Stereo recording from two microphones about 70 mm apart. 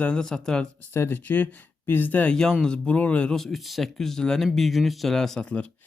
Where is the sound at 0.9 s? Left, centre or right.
Left.